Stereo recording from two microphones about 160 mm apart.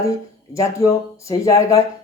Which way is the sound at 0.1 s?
20° left (ahead or behind).